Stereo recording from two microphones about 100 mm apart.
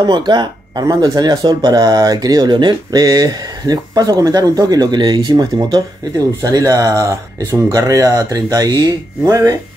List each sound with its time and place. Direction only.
0.0 s speech: 45° right (ahead or behind)
6.4 s speech: 35° right (ahead or behind)